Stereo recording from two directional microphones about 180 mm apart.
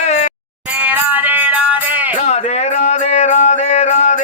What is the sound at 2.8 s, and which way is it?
Music, 40° left (ahead or behind).